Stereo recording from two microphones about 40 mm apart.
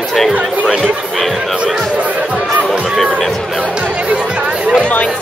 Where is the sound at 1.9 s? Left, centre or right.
Right.